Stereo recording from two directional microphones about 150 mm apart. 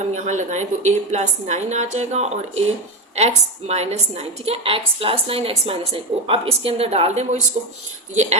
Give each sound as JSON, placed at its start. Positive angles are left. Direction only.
{"t": 0.3, "sound": "a woman's voice", "side_deg": -50}